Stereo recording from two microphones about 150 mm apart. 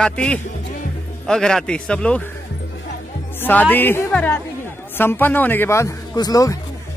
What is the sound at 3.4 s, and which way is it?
A man's voice, 10° left (ahead or behind).